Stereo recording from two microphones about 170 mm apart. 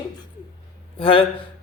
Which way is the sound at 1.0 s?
30° left (ahead or behind).